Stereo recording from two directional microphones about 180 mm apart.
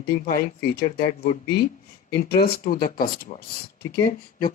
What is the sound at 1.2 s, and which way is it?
Speech, 55° left (ahead or behind).